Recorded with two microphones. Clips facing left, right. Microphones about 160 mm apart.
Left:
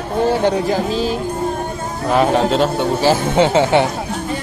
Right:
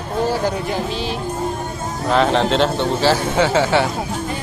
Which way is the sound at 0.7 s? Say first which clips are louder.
Left 5 dB; 40° left (ahead or behind).